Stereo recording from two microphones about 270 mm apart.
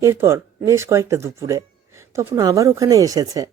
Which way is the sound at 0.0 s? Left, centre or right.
Centre.